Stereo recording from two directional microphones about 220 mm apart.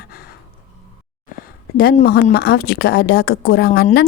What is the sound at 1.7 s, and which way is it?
A woman's voice, 45° left (ahead or behind).